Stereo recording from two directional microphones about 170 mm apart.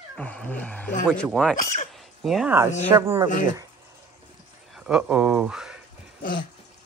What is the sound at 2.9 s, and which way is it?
Speech, 15° right (ahead or behind).